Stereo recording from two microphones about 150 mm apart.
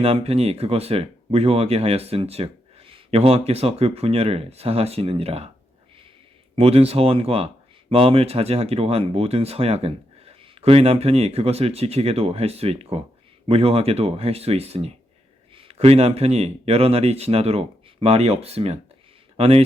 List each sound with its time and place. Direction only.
0.0 s speech: 40° right (ahead or behind)
6.6 s speech: 45° right (ahead or behind)